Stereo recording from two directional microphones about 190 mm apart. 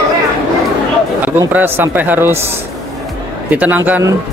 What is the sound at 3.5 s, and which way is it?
Speech, 10° right (ahead or behind).